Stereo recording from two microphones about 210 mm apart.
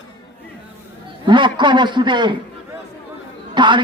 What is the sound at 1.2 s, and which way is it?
A man's voice, 20° right (ahead or behind).